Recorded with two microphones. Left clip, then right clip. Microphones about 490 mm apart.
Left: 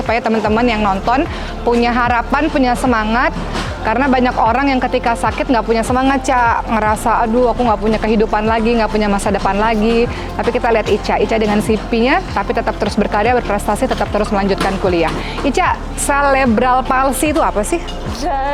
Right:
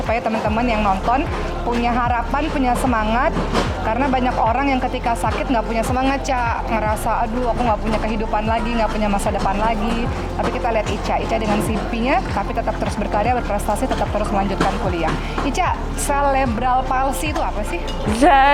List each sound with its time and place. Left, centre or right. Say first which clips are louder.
0.1 s a woman's voice: left 5 dB; left
18.2 s speech: right 6 dB; right